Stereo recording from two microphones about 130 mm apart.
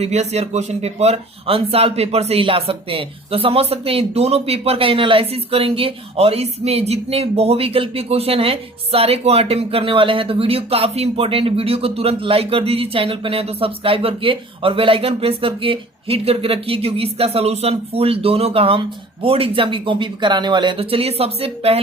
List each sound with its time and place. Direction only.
0.0 s speech: 55° right (ahead or behind)